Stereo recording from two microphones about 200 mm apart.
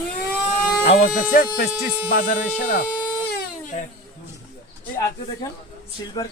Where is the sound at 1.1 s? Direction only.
50° left (ahead or behind).